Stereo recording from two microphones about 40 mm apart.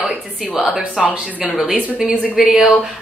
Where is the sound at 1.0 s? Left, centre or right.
Right.